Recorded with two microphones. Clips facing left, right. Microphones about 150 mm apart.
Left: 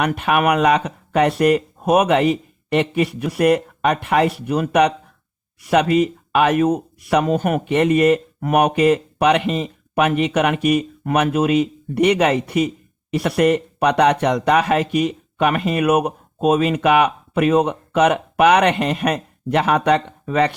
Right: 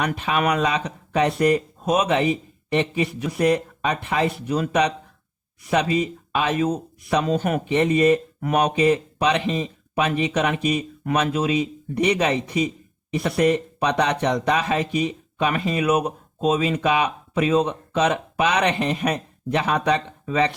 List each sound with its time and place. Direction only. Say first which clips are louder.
0.0 s speech: left 5 dB; 60° left (ahead or behind)
8.4 s speech: left 4 dB; 50° left (ahead or behind)